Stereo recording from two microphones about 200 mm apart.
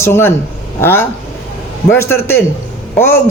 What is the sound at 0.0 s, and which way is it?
A man's voice, 10° left (ahead or behind).